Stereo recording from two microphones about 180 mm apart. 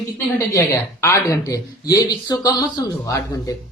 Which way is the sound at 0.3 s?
15° left (ahead or behind).